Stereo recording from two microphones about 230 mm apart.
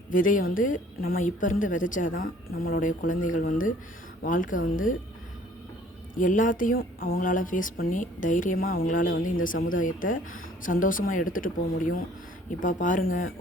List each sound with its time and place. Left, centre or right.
0.1 s a woman's voice: left
6.1 s a woman's voice: left